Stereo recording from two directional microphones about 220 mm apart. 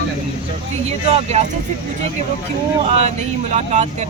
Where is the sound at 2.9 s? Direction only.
30° right (ahead or behind).